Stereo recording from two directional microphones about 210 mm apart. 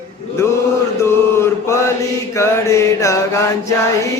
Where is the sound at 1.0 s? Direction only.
15° left (ahead or behind).